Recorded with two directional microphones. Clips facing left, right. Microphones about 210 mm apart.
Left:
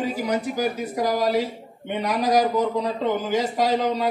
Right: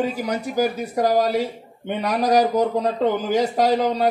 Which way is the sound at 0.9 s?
45° right (ahead or behind).